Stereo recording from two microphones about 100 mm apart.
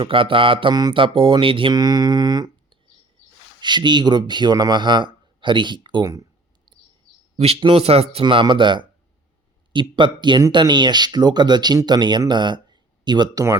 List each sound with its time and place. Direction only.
0.0 s speech: 60° right (ahead or behind)
0.7 s speech: 45° right (ahead or behind)
0.9 s speech: 60° right (ahead or behind)
1.7 s a sound: 40° right (ahead or behind)
3.6 s speech: 50° right (ahead or behind)
6.7 s chirp: 50° right (ahead or behind)
7.3 s a man's voice: 90° right
7.6 s speech: 75° right (ahead or behind)
8.2 s speech: 55° right (ahead or behind)
12.3 s a sound: 50° right (ahead or behind)